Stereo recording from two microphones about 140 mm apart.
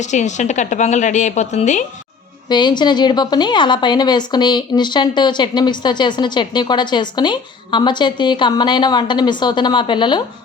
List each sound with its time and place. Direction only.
0.0 s a woman's voice: 60° left (ahead or behind)
2.5 s a woman's voice: 30° left (ahead or behind)